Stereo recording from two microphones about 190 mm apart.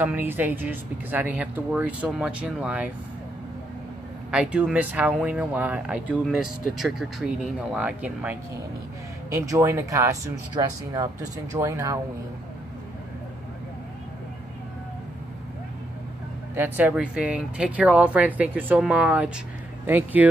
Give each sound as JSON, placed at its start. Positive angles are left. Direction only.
{"t": 0.0, "sound": "speech", "side_deg": -10}
{"t": 4.3, "sound": "speech", "side_deg": -5}
{"t": 16.5, "sound": "speech", "side_deg": -10}